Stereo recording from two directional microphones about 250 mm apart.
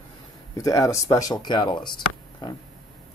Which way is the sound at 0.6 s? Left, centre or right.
Centre.